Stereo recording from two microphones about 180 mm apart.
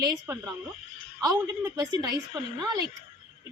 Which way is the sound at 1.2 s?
20° right (ahead or behind).